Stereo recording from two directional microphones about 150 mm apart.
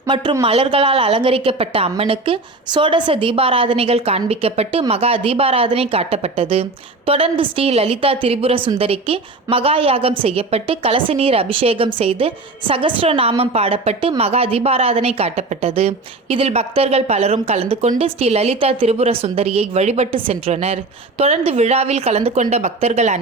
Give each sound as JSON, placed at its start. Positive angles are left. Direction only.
{"t": 0.1, "sound": "a woman's voice", "side_deg": -30}